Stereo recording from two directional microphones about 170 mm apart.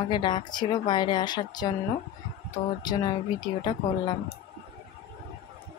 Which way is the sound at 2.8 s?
25° left (ahead or behind).